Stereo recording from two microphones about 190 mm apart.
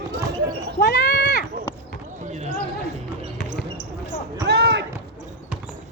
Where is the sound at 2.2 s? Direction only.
40° right (ahead or behind).